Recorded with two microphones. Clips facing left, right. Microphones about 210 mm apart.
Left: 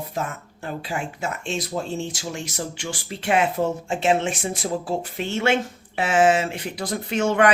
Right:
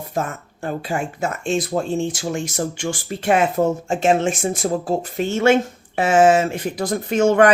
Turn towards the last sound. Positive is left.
turn(degrees=-45)  # may be behind; listen again after turning